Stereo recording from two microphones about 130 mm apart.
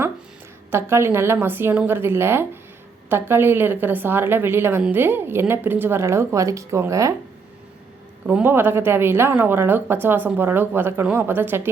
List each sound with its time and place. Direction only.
0.7 s a woman's voice: 20° right (ahead or behind)
8.3 s a woman's voice: 15° right (ahead or behind)